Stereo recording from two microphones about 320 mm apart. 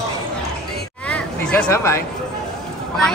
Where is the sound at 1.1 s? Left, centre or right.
Centre.